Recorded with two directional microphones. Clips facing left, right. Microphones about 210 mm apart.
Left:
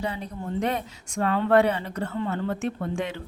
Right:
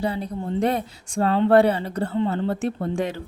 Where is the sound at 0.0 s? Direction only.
35° right (ahead or behind).